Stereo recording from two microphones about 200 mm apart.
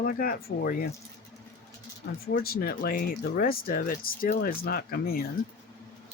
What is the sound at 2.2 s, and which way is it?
Speech, 50° left (ahead or behind).